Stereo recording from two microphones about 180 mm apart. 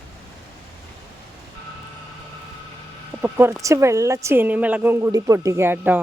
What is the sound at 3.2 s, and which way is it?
Speech, 10° right (ahead or behind).